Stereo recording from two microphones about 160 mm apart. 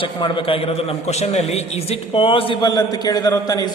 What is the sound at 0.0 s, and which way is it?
A man's voice, 35° left (ahead or behind).